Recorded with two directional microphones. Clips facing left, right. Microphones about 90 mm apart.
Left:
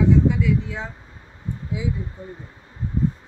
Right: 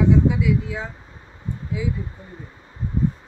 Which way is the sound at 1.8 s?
20° left (ahead or behind).